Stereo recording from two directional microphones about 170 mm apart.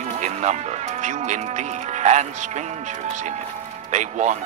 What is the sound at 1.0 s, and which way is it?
Speech, 45° right (ahead or behind).